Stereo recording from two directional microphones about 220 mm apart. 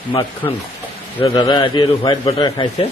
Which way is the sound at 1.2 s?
15° left (ahead or behind).